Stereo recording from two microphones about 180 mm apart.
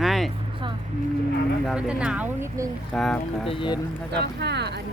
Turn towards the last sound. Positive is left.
turn(degrees=-65)  # may be behind; listen again after turning